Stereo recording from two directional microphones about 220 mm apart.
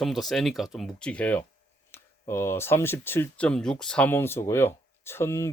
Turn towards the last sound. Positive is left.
turn(degrees=10)  # may be behind; listen again after turning